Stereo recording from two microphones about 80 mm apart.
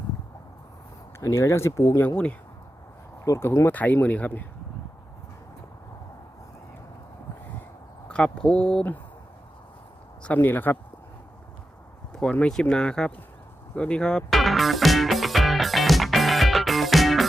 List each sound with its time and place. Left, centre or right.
1.2 s speech: left
3.2 s speech: left
3.7 s speech: left
8.0 s speech: centre
10.2 s speech: left
12.2 s speech: centre
14.3 s music: centre